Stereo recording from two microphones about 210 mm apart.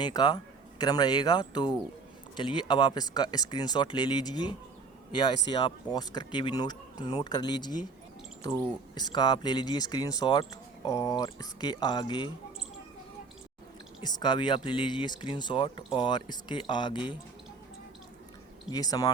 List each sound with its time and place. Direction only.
0.0 s speech: 20° left (ahead or behind)
14.0 s speech: 20° left (ahead or behind)
18.7 s speech: 20° left (ahead or behind)